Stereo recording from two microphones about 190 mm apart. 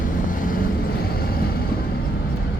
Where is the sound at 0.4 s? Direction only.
45° left (ahead or behind).